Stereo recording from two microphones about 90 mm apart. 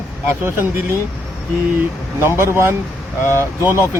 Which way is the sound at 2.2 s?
30° right (ahead or behind).